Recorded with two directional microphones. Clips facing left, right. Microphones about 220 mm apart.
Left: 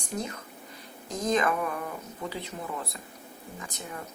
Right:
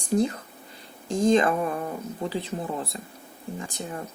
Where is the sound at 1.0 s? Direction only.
30° right (ahead or behind).